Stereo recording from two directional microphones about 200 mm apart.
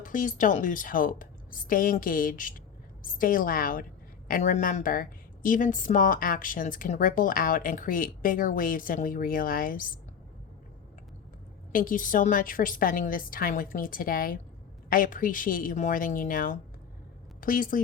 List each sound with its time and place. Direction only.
0.0 s a woman's voice: 40° left (ahead or behind)
11.7 s a woman's voice: 45° left (ahead or behind)